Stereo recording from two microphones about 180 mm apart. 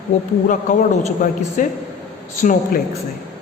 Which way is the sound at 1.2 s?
45° left (ahead or behind).